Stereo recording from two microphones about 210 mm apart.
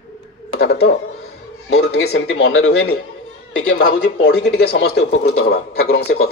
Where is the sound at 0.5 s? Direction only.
60° left (ahead or behind).